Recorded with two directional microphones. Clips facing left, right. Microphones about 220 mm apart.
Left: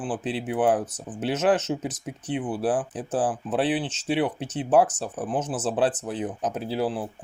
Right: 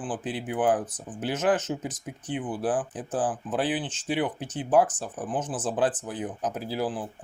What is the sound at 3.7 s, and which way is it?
Speech, 70° left (ahead or behind).